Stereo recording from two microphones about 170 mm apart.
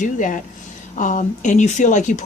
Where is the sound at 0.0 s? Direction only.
50° left (ahead or behind).